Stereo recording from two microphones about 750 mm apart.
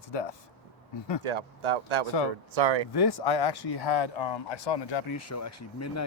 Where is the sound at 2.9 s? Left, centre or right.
Left.